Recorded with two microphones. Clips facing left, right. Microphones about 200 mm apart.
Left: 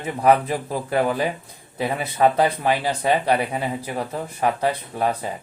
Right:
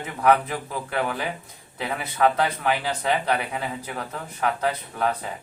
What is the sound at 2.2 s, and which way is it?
Speech, 20° left (ahead or behind).